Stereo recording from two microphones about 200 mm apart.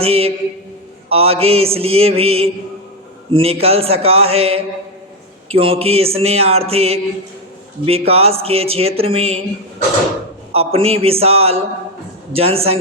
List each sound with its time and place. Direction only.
0.0 s speech: 30° right (ahead or behind)
10.5 s speech: 30° right (ahead or behind)